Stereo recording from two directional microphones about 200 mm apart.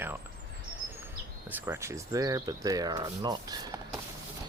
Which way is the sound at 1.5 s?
10° right (ahead or behind).